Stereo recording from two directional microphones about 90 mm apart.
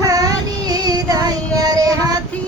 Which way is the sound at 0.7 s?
45° right (ahead or behind).